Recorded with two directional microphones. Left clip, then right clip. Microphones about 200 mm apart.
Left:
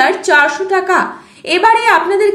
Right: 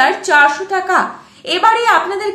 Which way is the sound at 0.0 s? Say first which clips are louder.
Even; 25° left (ahead or behind).